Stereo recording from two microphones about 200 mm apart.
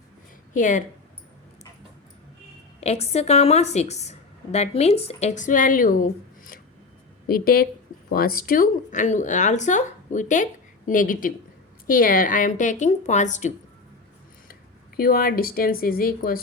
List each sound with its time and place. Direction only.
0.5 s a woman's voice: 40° left (ahead or behind)
2.8 s a woman's voice: 30° left (ahead or behind)
14.9 s speech: 50° left (ahead or behind)